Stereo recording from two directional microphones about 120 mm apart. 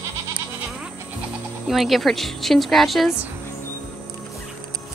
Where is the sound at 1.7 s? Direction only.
Centre (ahead or behind).